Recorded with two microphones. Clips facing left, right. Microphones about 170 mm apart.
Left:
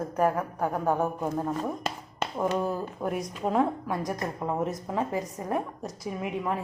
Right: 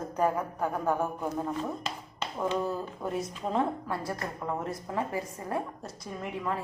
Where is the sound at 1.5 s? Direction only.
50° left (ahead or behind).